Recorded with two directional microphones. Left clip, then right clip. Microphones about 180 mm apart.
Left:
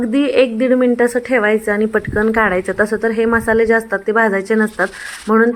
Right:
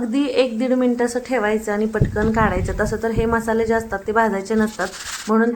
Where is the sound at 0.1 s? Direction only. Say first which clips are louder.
Left 5 dB; 20° left (ahead or behind).